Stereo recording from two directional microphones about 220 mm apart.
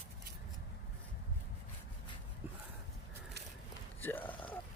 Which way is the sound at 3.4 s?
50° right (ahead or behind).